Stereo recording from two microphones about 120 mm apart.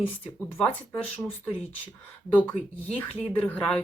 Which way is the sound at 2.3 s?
15° left (ahead or behind).